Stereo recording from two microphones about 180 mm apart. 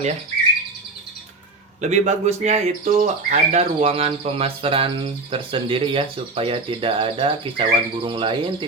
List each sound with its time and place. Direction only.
1.8 s speech: 40° right (ahead or behind)